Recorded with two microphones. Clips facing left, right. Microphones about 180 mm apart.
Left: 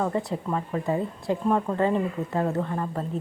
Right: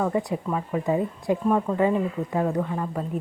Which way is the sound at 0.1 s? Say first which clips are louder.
Right 2 dB; 20° right (ahead or behind).